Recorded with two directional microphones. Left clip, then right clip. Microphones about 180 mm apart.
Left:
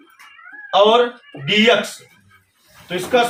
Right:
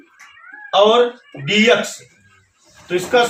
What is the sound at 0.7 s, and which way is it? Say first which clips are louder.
A man's voice: right 1 dB; 15° right (ahead or behind).